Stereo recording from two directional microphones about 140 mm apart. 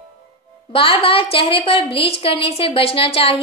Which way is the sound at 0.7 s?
40° left (ahead or behind).